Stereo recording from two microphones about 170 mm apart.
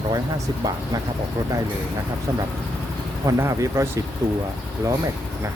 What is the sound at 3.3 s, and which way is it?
Speech, 15° right (ahead or behind).